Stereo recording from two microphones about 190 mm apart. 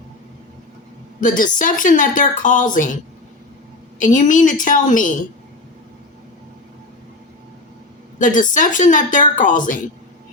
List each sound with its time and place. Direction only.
1.2 s a woman's voice: 45° left (ahead or behind)
4.0 s a woman's voice: 45° left (ahead or behind)
8.2 s a woman's voice: 45° left (ahead or behind)